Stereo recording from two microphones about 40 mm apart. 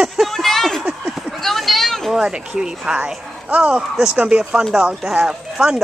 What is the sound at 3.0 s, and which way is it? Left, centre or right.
Speech, right.